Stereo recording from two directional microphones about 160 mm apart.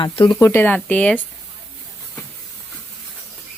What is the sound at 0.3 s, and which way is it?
Speech, 15° left (ahead or behind).